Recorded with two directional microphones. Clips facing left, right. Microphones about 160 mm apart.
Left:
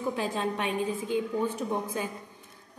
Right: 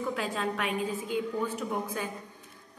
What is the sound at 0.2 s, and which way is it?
A woman's voice, 30° left (ahead or behind).